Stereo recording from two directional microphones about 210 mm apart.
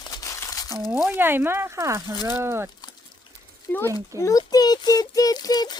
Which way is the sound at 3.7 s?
10° left (ahead or behind).